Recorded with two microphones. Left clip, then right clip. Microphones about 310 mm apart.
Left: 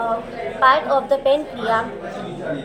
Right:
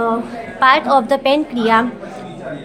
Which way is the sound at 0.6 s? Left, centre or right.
Right.